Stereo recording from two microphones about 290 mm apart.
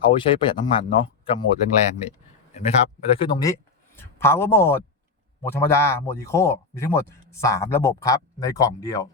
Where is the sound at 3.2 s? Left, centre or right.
Centre.